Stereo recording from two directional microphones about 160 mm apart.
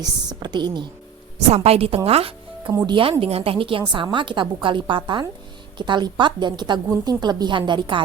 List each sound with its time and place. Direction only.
0.0 s speech: 25° right (ahead or behind)
1.5 s a woman's voice: 40° right (ahead or behind)